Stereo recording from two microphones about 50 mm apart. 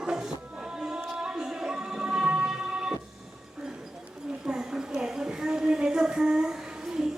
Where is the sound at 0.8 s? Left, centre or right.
Centre.